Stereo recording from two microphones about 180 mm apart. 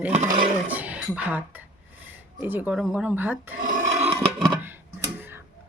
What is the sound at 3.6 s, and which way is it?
Filing, 45° right (ahead or behind).